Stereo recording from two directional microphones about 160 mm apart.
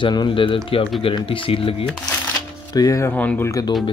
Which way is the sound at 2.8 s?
20° left (ahead or behind).